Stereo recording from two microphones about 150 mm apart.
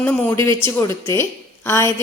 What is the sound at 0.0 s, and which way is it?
A woman's voice, 10° left (ahead or behind).